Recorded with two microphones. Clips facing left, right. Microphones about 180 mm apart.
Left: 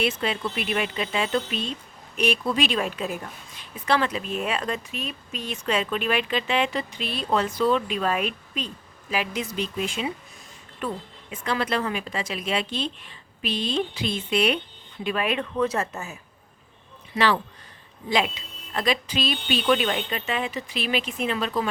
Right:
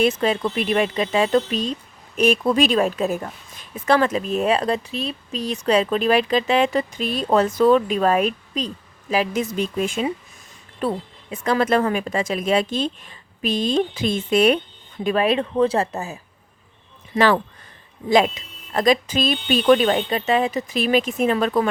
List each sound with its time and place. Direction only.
0.0 s a woman's voice: 45° right (ahead or behind)
10.8 s a woman's voice: 35° right (ahead or behind)
17.2 s a woman's voice: 50° right (ahead or behind)